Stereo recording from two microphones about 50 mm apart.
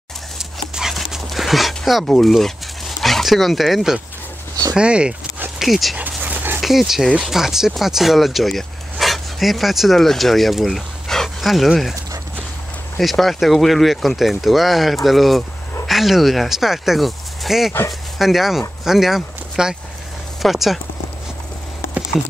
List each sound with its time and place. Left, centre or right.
0.4 s dog: centre
2.0 s speech: centre
4.7 s speech: right
5.6 s speech: centre
5.9 s dog: right
6.6 s speech: centre
13.0 s speech: centre